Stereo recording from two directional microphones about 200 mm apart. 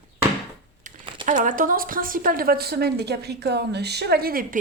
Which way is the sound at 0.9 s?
40° right (ahead or behind).